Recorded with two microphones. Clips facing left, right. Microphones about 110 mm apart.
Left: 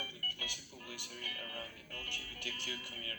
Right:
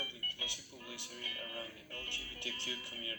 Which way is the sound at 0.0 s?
20° right (ahead or behind).